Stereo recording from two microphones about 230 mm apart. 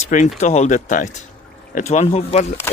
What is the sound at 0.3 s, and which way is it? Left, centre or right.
Speech, left.